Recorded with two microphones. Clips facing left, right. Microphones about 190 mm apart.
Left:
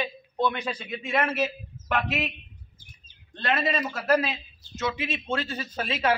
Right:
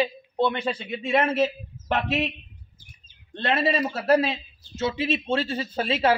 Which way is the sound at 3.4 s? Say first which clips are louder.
Right 3 dB; 30° right (ahead or behind).